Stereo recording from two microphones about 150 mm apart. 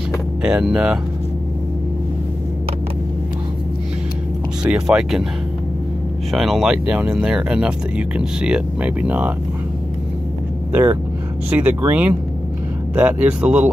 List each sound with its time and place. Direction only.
0.4 s speech: 5° right (ahead or behind)
4.6 s speech: 5° right (ahead or behind)
6.3 s speech: centre (ahead or behind)
10.7 s speech: 15° right (ahead or behind)